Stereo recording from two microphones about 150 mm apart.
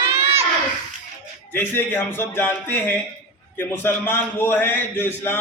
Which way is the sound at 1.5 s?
15° left (ahead or behind).